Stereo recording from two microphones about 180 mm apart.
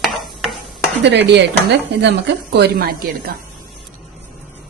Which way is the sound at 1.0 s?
75° right (ahead or behind).